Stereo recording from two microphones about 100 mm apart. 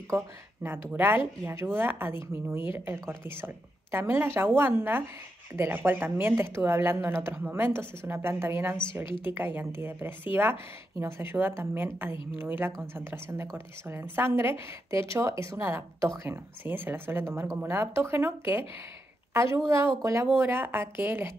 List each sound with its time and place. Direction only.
0.7 s a woman's voice: 20° right (ahead or behind)
19.7 s a woman's voice: 25° right (ahead or behind)